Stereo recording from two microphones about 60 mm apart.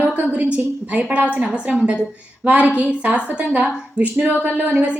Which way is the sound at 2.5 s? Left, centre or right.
Right.